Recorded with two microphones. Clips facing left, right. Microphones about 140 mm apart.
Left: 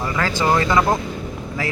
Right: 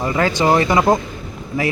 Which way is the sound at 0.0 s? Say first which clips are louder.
Right 4 dB; 20° right (ahead or behind).